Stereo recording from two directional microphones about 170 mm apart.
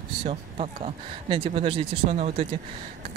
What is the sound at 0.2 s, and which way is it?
Speech, 35° right (ahead or behind).